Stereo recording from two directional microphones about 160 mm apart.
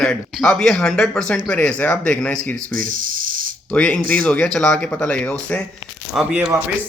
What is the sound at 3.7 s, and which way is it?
Speech, 5° left (ahead or behind).